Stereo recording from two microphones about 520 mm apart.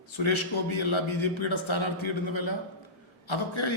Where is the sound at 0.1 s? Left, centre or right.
Left.